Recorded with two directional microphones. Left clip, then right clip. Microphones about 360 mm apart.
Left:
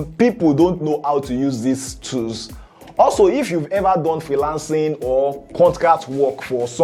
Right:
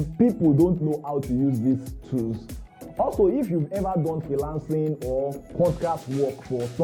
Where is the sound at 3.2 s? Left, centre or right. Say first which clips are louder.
Left 7 dB; centre.